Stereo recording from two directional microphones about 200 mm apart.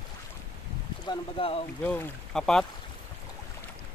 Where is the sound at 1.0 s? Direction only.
25° left (ahead or behind).